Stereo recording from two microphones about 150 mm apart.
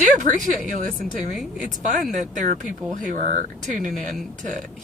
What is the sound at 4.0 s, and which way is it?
Speech, 60° right (ahead or behind).